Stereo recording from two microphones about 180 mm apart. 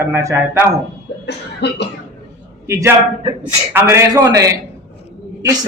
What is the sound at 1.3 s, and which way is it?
Cough, 70° left (ahead or behind).